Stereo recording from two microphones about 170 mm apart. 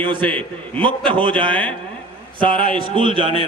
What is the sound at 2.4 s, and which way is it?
Speech, 30° right (ahead or behind).